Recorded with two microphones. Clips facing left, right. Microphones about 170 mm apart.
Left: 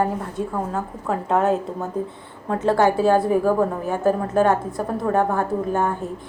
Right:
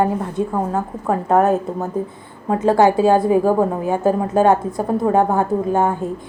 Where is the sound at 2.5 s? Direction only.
15° right (ahead or behind).